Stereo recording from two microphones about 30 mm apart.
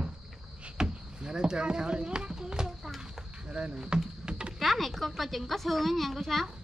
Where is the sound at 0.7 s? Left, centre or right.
Right.